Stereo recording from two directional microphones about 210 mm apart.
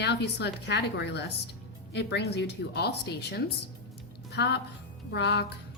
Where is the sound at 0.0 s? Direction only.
55° left (ahead or behind).